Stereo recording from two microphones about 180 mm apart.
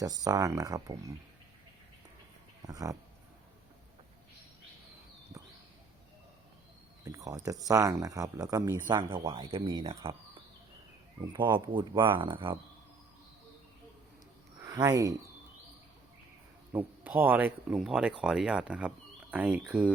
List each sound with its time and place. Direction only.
0.0 s speech: 20° right (ahead or behind)
2.6 s speech: 20° right (ahead or behind)
7.0 s speech: 20° right (ahead or behind)
9.0 s speech: 30° right (ahead or behind)
11.3 s speech: 25° right (ahead or behind)
14.6 s speech: 20° right (ahead or behind)
16.7 s speech: 10° right (ahead or behind)